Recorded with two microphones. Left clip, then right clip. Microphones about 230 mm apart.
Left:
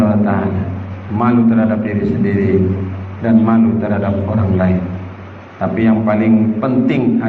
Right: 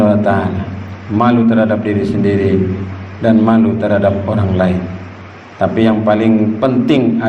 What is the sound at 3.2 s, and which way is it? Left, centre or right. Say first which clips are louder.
Speech: right 2 dB; right.